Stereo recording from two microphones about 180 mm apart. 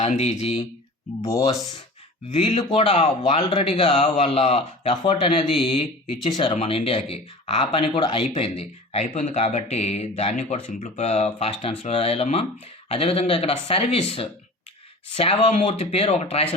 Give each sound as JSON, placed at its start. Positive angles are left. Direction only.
{"t": 0.0, "sound": "speech", "side_deg": 40}
{"t": 1.2, "sound": "speech", "side_deg": 15}
{"t": 2.3, "sound": "speech", "side_deg": 35}